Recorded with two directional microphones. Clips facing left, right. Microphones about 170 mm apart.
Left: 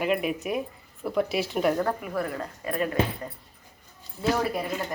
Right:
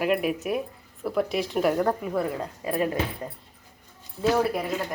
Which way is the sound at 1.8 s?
15° right (ahead or behind).